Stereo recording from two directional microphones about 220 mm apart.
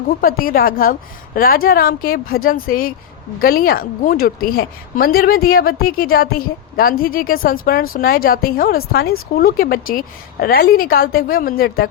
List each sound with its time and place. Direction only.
0.1 s a woman's voice: 40° left (ahead or behind)